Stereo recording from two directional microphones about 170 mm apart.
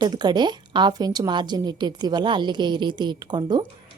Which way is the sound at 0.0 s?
25° right (ahead or behind).